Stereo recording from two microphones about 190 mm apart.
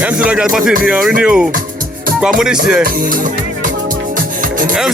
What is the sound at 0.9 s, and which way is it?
Speech, 5° right (ahead or behind).